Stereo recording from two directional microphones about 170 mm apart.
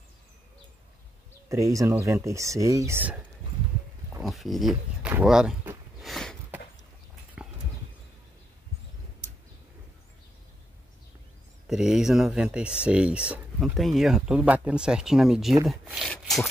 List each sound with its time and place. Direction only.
1.5 s speech: 20° right (ahead or behind)
4.2 s speech: centre (ahead or behind)
5.1 s a sound: 5° right (ahead or behind)
7.4 s horse: 5° right (ahead or behind)
11.7 s speech: 5° right (ahead or behind)
15.7 s a sound: centre (ahead or behind)